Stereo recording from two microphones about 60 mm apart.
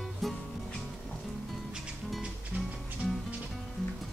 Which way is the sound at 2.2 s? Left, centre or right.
Centre.